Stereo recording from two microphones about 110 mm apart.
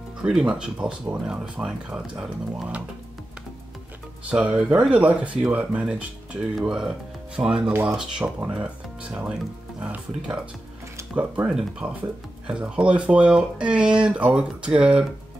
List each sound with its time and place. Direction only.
0.2 s speech: 10° right (ahead or behind)
4.3 s speech: 10° right (ahead or behind)
11.1 s speech: 10° right (ahead or behind)